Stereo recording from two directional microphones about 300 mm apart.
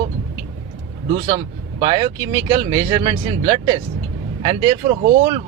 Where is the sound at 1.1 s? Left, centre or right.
Centre.